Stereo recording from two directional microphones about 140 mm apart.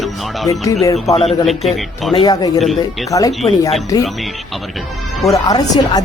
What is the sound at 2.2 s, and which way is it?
Speech, 25° left (ahead or behind).